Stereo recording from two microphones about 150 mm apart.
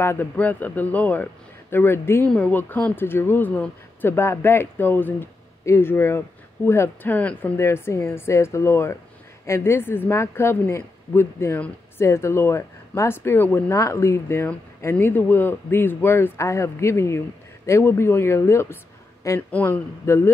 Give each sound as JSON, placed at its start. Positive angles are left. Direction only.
{"t": 0.0, "sound": "a man's voice", "side_deg": 15}